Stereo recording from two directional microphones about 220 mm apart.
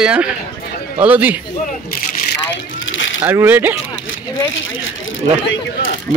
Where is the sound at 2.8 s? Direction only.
60° left (ahead or behind).